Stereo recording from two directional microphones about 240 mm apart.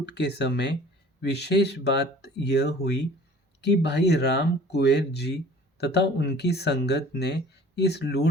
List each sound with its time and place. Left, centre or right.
0.0 s speech: left